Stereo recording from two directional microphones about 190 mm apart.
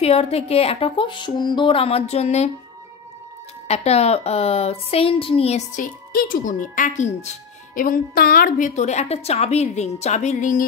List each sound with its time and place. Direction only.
0.0 s speech: 30° left (ahead or behind)
3.6 s speech: 35° left (ahead or behind)
6.1 s speech: 45° left (ahead or behind)